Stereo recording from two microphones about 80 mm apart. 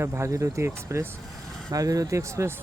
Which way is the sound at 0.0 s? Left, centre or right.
Right.